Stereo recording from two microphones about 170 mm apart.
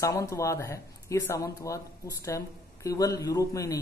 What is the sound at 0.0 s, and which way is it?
Speech, 20° left (ahead or behind).